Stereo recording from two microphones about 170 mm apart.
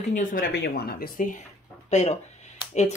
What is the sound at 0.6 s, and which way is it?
Speech, 65° left (ahead or behind).